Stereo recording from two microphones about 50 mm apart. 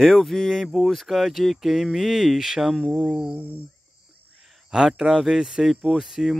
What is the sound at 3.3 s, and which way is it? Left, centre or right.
Cricket, right.